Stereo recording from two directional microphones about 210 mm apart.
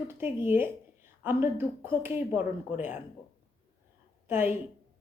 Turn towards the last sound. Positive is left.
turn(degrees=-10)  # may be behind; listen again after turning